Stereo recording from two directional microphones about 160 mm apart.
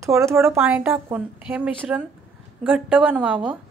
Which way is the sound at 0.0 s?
15° right (ahead or behind).